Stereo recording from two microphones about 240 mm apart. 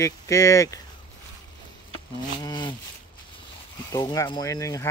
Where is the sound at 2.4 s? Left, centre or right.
Centre.